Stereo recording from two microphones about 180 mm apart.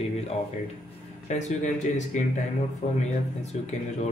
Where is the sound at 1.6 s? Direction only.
40° left (ahead or behind).